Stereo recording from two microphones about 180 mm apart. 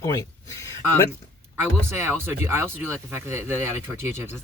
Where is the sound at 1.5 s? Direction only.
15° right (ahead or behind).